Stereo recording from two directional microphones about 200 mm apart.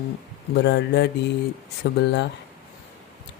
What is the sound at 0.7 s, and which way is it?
Speech, 60° left (ahead or behind).